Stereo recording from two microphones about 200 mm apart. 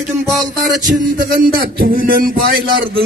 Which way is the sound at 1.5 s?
50° right (ahead or behind).